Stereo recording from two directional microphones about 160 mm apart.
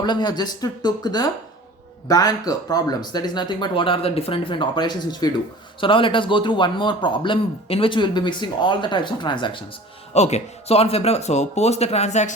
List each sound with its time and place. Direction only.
0.0 s a man's voice: 25° left (ahead or behind)
10.2 s speech: 45° left (ahead or behind)